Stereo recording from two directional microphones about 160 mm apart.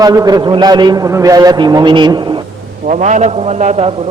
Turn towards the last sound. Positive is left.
turn(degrees=-45)  # may be behind; listen again after turning